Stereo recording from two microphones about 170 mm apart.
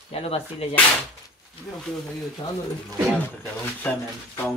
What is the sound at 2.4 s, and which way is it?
Speech, 25° left (ahead or behind).